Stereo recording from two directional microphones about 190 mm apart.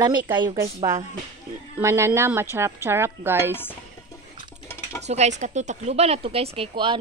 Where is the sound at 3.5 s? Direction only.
10° left (ahead or behind).